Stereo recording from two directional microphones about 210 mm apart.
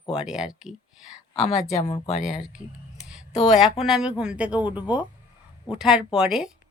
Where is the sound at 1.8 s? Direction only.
25° left (ahead or behind).